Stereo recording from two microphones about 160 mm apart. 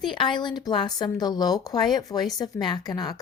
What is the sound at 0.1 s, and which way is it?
Speech, 30° left (ahead or behind).